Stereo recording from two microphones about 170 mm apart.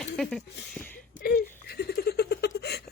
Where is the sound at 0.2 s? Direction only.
Centre (ahead or behind).